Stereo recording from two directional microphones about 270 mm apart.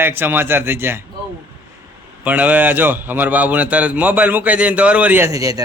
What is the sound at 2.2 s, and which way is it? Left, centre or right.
A man's voice, centre.